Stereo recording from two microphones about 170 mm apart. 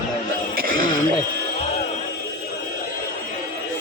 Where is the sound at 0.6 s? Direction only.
55° right (ahead or behind).